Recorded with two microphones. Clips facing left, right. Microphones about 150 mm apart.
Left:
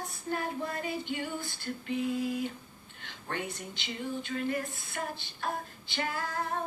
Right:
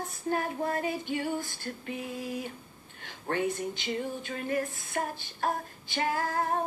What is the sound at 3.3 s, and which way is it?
Speech, 45° right (ahead or behind).